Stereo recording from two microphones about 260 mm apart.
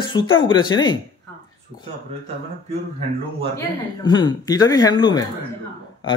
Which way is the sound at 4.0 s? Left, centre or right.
Centre.